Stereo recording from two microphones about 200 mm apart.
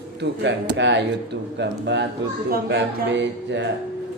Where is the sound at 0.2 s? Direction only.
60° right (ahead or behind).